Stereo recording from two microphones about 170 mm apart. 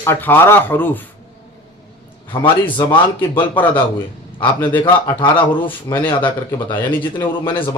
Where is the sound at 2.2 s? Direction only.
30° left (ahead or behind).